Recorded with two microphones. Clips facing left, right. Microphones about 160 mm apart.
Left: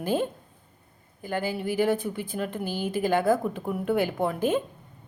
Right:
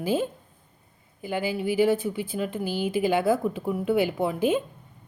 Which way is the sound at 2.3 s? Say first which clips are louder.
Right 1 dB; centre (ahead or behind).